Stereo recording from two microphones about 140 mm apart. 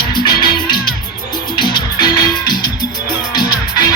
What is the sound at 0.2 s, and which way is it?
Music, 30° left (ahead or behind).